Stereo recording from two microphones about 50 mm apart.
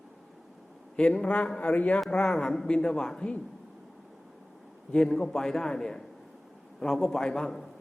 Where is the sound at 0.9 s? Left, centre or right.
Left.